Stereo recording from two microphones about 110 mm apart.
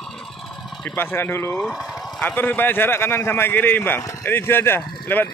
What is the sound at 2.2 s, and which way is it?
Speech, 15° left (ahead or behind).